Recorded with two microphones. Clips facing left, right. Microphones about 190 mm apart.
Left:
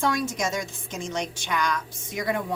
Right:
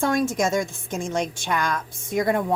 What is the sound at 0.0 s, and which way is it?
A woman's voice, 50° right (ahead or behind).